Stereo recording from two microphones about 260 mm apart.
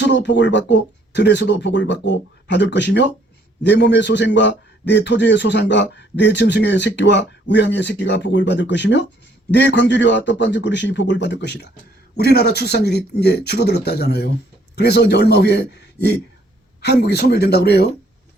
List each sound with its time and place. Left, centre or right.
0.0 s a man's voice: left